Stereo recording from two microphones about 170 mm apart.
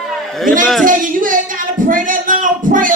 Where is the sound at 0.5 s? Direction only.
55° right (ahead or behind).